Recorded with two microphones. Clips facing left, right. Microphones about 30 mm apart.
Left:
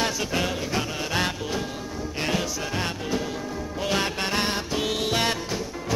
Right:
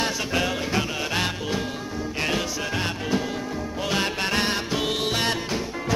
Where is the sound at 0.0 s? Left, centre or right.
Centre.